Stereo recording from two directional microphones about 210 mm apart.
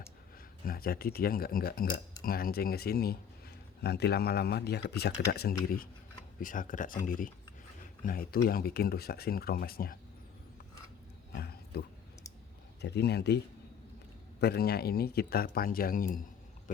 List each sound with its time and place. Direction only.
0.6 s speech: 45° left (ahead or behind)
11.3 s roaring cats: 50° left (ahead or behind)
12.8 s speech: 50° left (ahead or behind)
14.4 s speech: 50° left (ahead or behind)